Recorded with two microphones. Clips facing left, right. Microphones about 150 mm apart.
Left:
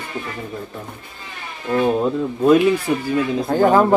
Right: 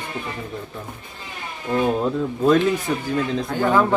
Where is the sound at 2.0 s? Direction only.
10° left (ahead or behind).